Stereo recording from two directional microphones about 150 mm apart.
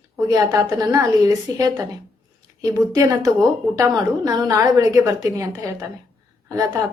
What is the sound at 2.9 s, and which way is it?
Speech, 20° right (ahead or behind).